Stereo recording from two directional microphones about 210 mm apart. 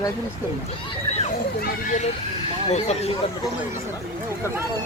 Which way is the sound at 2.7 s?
30° left (ahead or behind).